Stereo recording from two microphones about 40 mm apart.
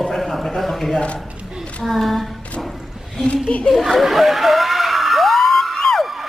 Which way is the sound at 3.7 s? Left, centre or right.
Centre.